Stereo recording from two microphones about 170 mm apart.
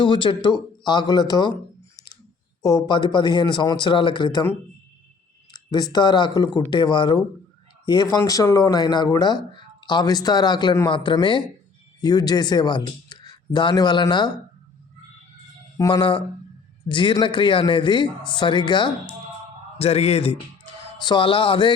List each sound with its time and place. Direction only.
0.0 s speech: 30° left (ahead or behind)
2.6 s speech: 25° left (ahead or behind)
5.5 s speech: 25° left (ahead or behind)
15.8 s a man's voice: 25° left (ahead or behind)